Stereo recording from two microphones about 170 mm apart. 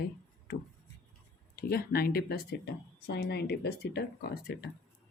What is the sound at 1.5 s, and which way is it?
Speech, 60° left (ahead or behind).